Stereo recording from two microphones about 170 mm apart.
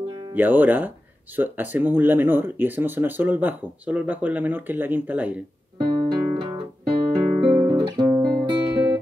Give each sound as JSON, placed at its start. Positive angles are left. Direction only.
{"t": 0.3, "sound": "speech", "side_deg": -10}
{"t": 5.8, "sound": "guitar", "side_deg": -25}